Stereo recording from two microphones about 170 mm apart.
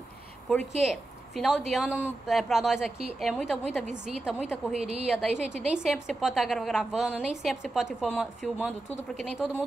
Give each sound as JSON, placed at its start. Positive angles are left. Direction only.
{"t": 0.5, "sound": "a woman's voice", "side_deg": 0}
{"t": 4.7, "sound": "a woman's voice", "side_deg": -40}
{"t": 5.0, "sound": "a woman's voice", "side_deg": -5}